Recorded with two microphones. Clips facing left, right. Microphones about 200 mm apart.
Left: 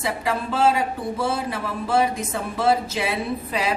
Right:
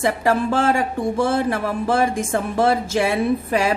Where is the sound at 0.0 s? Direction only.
50° right (ahead or behind).